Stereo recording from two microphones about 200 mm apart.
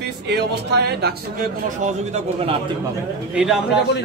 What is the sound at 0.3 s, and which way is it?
Speech, 55° right (ahead or behind).